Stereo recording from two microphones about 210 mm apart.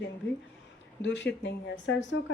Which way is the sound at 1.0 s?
60° left (ahead or behind).